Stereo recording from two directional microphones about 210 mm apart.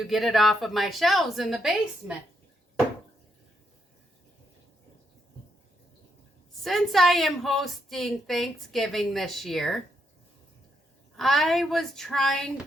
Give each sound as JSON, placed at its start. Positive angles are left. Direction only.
{"t": 0.0, "sound": "a woman's voice", "side_deg": 0}
{"t": 6.5, "sound": "a woman's voice", "side_deg": 0}
{"t": 11.2, "sound": "a woman's voice", "side_deg": 0}